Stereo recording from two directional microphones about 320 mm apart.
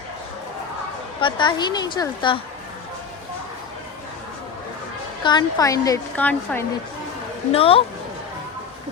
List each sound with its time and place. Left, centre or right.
1.2 s a woman's voice: centre
5.2 s a woman's voice: centre
7.5 s a woman's voice: centre